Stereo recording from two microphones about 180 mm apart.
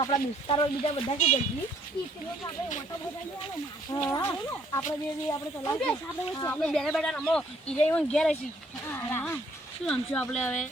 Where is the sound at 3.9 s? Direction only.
15° left (ahead or behind).